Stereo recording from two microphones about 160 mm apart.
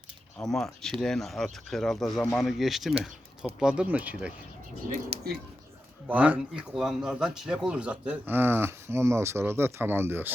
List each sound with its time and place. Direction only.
0.3 s speech: 5° left (ahead or behind)
4.9 s speech: 40° right (ahead or behind)
6.1 s speech: 10° right (ahead or behind)